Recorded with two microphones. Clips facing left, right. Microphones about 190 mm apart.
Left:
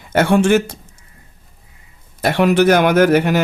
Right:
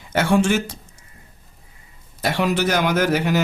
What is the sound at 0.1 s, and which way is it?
Speech, 55° left (ahead or behind).